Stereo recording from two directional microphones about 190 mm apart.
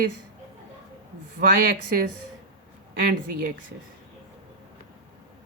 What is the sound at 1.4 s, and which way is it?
A woman's voice, 50° right (ahead or behind).